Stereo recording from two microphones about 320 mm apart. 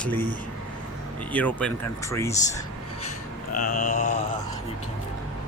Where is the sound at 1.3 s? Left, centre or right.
Centre.